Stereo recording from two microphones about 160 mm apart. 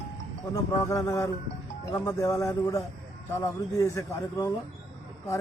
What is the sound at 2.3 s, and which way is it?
A man's voice, 20° left (ahead or behind).